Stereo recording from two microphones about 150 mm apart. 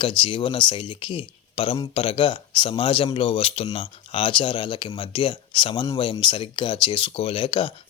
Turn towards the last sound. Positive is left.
turn(degrees=35)  # may be behind; listen again after turning